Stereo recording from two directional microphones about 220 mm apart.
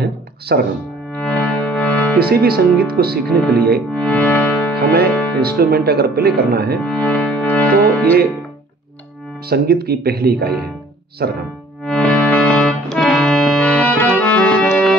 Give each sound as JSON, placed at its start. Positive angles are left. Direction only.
{"t": 0.5, "sound": "speech", "side_deg": -45}
{"t": 1.1, "sound": "music", "side_deg": 5}
{"t": 2.1, "sound": "speech", "side_deg": -45}
{"t": 3.9, "sound": "music", "side_deg": 5}
{"t": 4.7, "sound": "speech", "side_deg": -45}
{"t": 6.8, "sound": "music", "side_deg": 5}
{"t": 9.5, "sound": "speech", "side_deg": -45}
{"t": 11.8, "sound": "music", "side_deg": 5}